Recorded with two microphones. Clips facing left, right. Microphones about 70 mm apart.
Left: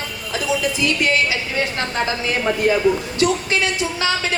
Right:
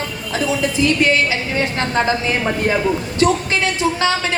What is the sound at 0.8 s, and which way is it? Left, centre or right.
Speech, right.